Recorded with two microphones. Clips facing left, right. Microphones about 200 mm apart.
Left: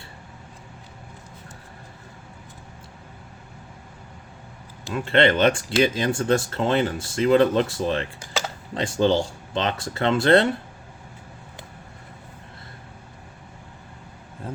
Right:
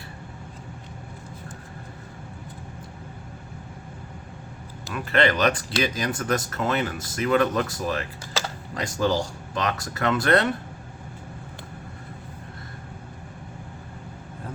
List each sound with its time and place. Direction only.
4.9 s speech: 25° left (ahead or behind)